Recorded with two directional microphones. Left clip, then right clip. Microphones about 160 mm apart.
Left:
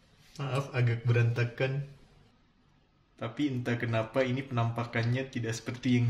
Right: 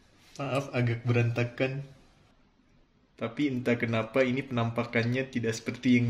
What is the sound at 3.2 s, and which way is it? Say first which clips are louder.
Speech: right 3 dB; 40° right (ahead or behind).